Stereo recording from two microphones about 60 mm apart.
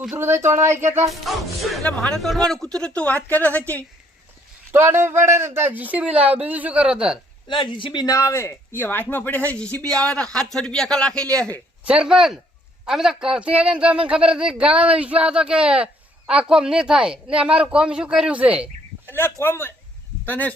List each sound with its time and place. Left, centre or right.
0.2 s speech: right
1.1 s music: centre
2.0 s a woman's voice: centre; by 3.8 s left
4.7 s speech: right
5.7 s speech: right
6.8 s speech: centre
8.0 s speech: left
8.7 s speech: left; by 11.5 s centre
11.9 s speech: centre
19.0 s speech: left